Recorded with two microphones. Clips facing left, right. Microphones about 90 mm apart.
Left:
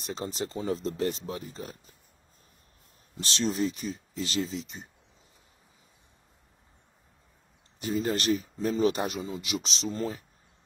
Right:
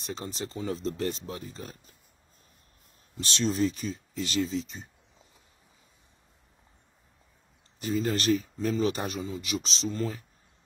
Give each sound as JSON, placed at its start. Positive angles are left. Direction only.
{"t": 0.0, "sound": "speech", "side_deg": 25}
{"t": 3.3, "sound": "speech", "side_deg": 30}
{"t": 7.8, "sound": "speech", "side_deg": 30}
{"t": 9.4, "sound": "speech", "side_deg": -30}
{"t": 9.8, "sound": "speech", "side_deg": 30}